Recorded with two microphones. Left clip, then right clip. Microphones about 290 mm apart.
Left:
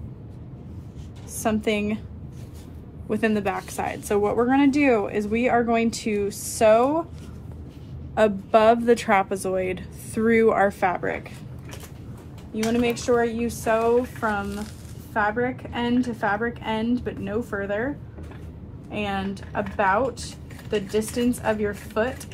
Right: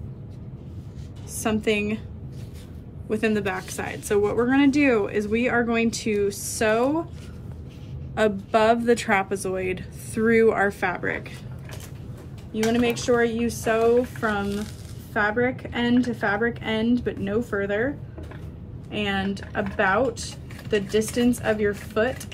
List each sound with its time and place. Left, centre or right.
1.3 s a woman's voice: centre
3.1 s a woman's voice: centre
8.1 s a woman's voice: centre
12.8 s a woman's voice: centre